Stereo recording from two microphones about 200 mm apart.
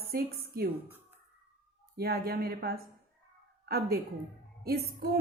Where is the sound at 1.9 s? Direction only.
50° right (ahead or behind).